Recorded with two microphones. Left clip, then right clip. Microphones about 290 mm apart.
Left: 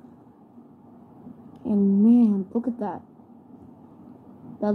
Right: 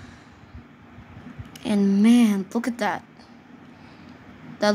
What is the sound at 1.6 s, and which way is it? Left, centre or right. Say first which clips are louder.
Speech: right 1 dB; right.